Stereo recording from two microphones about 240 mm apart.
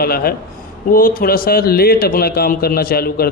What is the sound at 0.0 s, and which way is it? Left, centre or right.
A man's voice, left.